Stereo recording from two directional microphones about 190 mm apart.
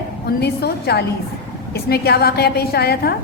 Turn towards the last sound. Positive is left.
turn(degrees=55)  # may be behind; listen again after turning